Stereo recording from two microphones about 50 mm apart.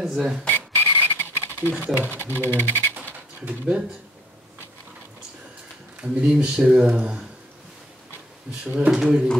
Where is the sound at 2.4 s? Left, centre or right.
Left.